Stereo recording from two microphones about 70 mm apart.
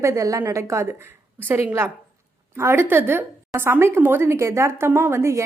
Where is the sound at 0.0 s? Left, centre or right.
Right.